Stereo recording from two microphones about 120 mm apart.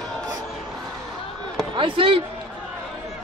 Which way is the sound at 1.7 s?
45° right (ahead or behind).